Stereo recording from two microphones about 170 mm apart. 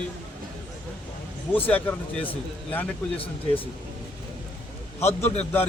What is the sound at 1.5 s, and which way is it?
Speech, 10° left (ahead or behind).